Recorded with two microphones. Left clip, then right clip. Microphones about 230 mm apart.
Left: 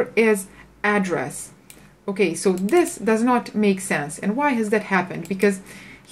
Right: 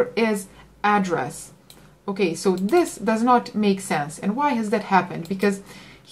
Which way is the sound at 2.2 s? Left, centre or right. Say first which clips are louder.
Right 3 dB; centre.